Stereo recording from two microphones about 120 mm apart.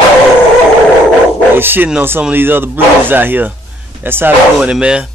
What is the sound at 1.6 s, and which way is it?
Speech, 15° right (ahead or behind).